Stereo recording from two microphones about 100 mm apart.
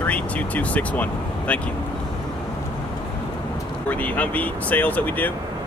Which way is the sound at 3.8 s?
15° left (ahead or behind).